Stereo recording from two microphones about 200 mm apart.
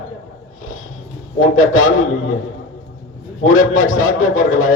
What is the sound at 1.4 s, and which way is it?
Speech, 90° left.